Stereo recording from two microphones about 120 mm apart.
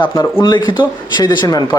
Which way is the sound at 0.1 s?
25° left (ahead or behind).